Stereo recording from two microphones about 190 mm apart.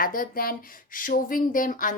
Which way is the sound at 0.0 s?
45° left (ahead or behind).